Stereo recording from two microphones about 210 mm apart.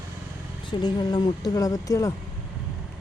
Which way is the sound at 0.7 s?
20° left (ahead or behind).